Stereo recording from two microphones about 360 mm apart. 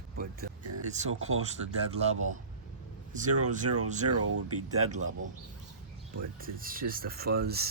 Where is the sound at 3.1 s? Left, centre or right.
Right.